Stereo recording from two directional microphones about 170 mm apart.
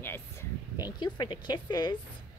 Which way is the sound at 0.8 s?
25° left (ahead or behind).